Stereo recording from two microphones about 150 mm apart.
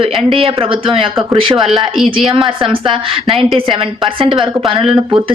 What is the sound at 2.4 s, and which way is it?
Speech, 35° right (ahead or behind).